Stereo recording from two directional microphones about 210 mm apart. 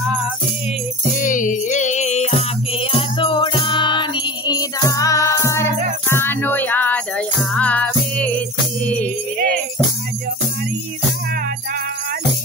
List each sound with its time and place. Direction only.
1.1 s music: 40° left (ahead or behind); by 9.1 s 5° left (ahead or behind)